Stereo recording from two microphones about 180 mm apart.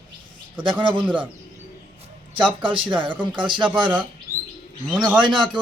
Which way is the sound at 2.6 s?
25° right (ahead or behind).